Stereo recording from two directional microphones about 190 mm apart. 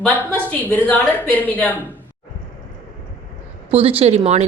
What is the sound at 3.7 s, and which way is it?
Speech, 30° right (ahead or behind).